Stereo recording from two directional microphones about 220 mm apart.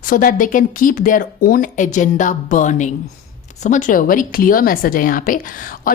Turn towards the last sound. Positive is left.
turn(degrees=40)  # may be behind; listen again after turning